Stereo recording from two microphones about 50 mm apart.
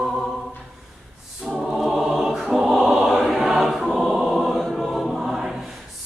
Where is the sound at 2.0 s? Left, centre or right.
Centre.